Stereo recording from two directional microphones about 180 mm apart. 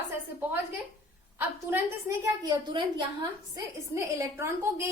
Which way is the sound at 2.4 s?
25° right (ahead or behind).